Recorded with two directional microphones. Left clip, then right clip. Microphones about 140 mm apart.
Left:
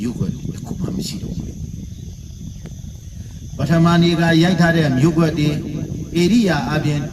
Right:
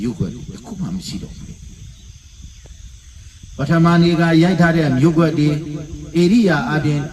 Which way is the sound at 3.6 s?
25° left (ahead or behind).